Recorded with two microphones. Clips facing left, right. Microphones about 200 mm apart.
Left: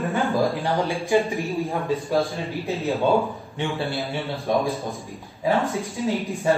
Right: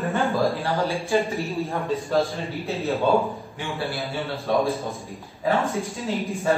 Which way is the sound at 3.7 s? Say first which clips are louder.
Even; centre (ahead or behind).